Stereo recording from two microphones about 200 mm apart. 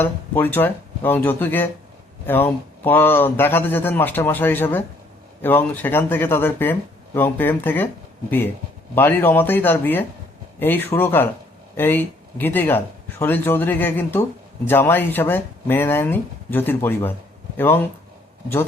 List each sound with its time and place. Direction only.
0.0 s a man's voice: 10° left (ahead or behind)
9.0 s a man's voice: 10° left (ahead or behind)